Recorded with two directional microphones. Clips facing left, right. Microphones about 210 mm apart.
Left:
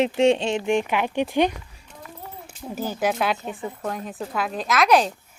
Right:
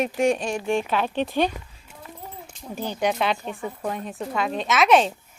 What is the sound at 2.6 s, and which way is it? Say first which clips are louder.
Speech: left 1 dB; 5° left (ahead or behind).